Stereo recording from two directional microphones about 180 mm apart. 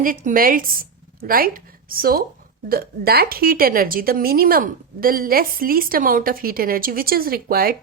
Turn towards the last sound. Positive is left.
turn(degrees=-55)  # may be behind; listen again after turning